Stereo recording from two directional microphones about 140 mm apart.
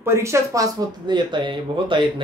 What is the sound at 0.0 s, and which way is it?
Speech, 20° right (ahead or behind).